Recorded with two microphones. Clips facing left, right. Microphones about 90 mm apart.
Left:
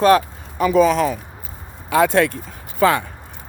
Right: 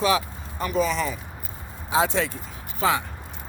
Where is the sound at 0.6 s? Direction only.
90° left.